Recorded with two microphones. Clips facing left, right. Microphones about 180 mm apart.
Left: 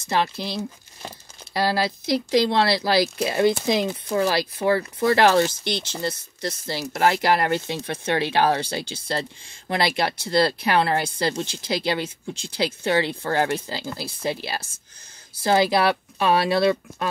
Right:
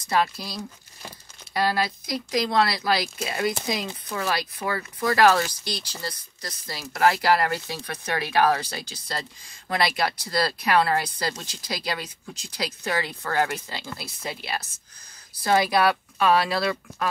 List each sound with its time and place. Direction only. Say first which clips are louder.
0.0 s speech: left 1 dB; 25° left (ahead or behind)